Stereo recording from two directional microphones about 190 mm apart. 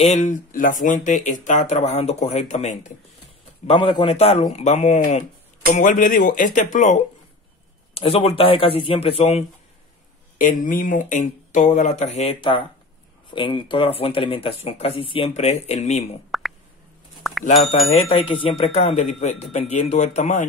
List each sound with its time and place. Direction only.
0.0 s speech: 35° left (ahead or behind)
3.6 s speech: 25° left (ahead or behind)
10.3 s speech: 45° left (ahead or behind)
16.3 s plop: centre (ahead or behind)
17.2 s a sound: centre (ahead or behind)
18.0 s speech: 30° left (ahead or behind)